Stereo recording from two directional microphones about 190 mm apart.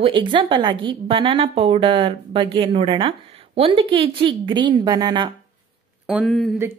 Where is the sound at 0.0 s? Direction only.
25° right (ahead or behind).